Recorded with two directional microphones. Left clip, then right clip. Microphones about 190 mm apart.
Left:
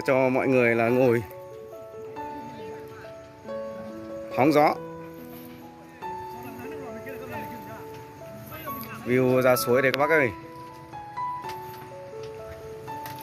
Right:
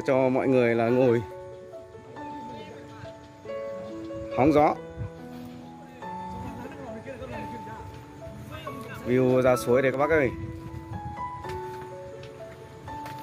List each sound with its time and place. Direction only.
0.0 s speech: centre (ahead or behind)
4.3 s speech: centre (ahead or behind)
9.0 s speech: centre (ahead or behind)